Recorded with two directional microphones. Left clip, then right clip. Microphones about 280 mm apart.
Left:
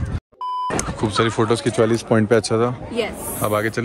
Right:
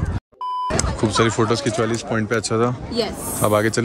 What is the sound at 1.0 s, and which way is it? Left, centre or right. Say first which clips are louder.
Speech: right 1 dB; centre.